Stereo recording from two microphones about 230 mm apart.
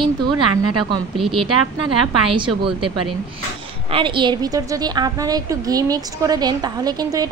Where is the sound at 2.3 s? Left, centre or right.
Right.